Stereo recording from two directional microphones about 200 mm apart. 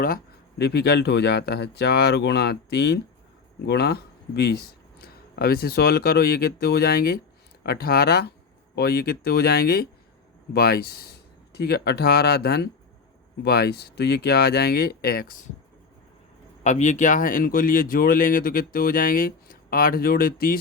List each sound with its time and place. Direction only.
0.6 s speech: 55° left (ahead or behind)
16.6 s speech: 35° left (ahead or behind)